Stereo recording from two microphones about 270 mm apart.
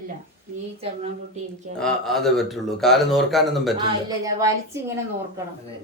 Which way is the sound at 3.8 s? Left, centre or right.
Centre.